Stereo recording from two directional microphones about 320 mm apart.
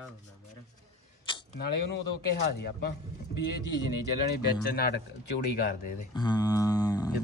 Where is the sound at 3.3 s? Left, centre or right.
Left.